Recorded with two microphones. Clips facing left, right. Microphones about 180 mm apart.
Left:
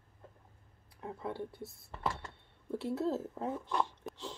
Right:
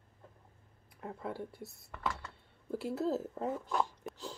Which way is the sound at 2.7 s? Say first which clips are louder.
Even; centre (ahead or behind).